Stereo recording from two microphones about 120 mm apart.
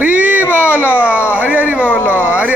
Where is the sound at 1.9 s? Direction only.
20° left (ahead or behind).